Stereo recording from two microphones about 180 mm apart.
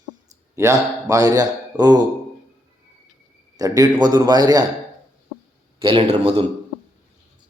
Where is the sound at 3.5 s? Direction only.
20° right (ahead or behind).